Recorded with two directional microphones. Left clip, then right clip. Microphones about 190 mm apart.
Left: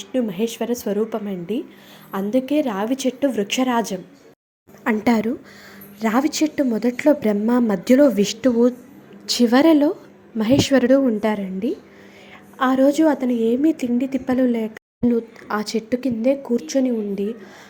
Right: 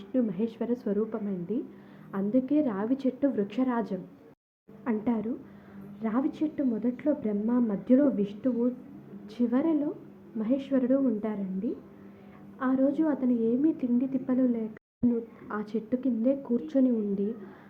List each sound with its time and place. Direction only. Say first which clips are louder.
0.0 s a woman's voice: left 7 dB; 20° left (ahead or behind)
4.8 s a woman's voice: left 11 dB; 40° left (ahead or behind); by 17.3 s 20° left (ahead or behind)